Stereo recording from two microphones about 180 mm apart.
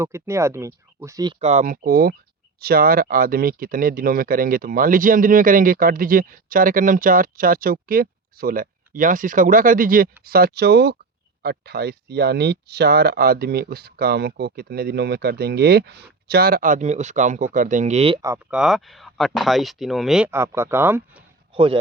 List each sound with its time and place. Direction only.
0.0 s speech: 15° right (ahead or behind)
1.4 s speech: 40° right (ahead or behind)
18.5 s speech: centre (ahead or behind)
21.5 s a man's voice: 30° right (ahead or behind)